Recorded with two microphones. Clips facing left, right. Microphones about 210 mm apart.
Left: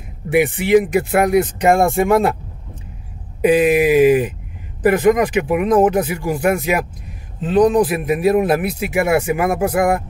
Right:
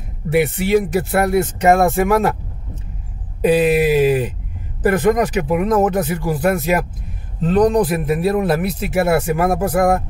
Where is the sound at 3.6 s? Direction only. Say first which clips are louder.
Left 2 dB; 15° left (ahead or behind).